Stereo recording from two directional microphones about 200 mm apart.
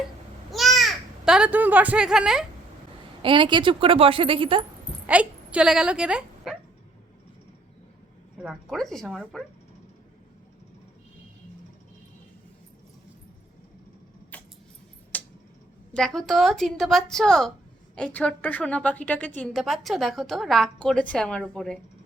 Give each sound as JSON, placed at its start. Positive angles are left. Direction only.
{"t": 0.5, "sound": "a sound", "side_deg": 0}
{"t": 3.2, "sound": "a woman's voice", "side_deg": -25}
{"t": 5.0, "sound": "speech", "side_deg": -5}
{"t": 8.4, "sound": "a woman's voice", "side_deg": 0}
{"t": 14.3, "sound": "keys jangling", "side_deg": 10}
{"t": 15.1, "sound": "tick-tock", "side_deg": 10}
{"t": 15.9, "sound": "a woman's voice", "side_deg": 5}